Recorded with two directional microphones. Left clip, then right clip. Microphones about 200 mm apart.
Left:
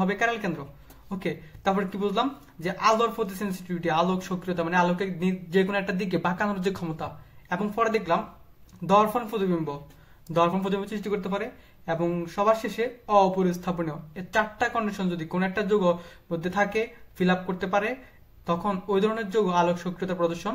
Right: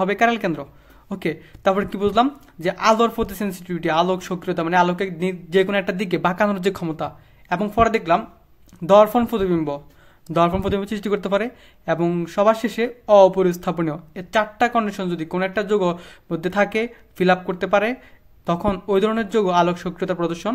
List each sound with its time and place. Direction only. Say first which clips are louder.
0.0 s speech: right 7 dB; 40° right (ahead or behind)